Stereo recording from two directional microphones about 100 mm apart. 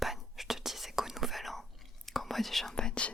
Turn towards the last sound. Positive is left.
turn(degrees=10)  # may be behind; listen again after turning